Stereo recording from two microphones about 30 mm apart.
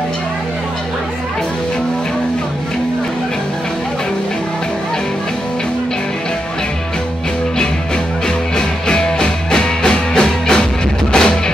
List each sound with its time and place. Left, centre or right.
8.5 s music: left